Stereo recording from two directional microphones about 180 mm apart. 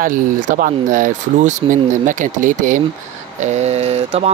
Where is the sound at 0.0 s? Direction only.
45° right (ahead or behind).